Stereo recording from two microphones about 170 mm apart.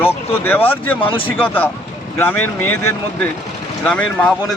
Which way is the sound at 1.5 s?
10° left (ahead or behind).